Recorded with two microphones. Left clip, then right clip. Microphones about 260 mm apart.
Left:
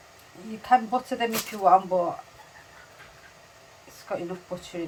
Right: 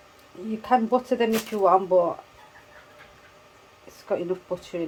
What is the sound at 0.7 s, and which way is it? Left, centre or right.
Speech, right.